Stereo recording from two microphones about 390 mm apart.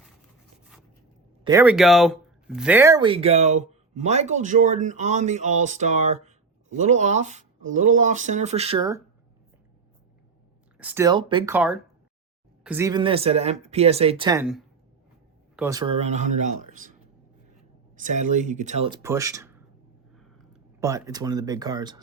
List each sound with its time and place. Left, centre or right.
1.5 s speech: centre
10.8 s speech: centre
17.9 s speech: centre